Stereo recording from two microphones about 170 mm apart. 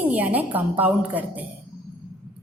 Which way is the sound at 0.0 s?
10° right (ahead or behind).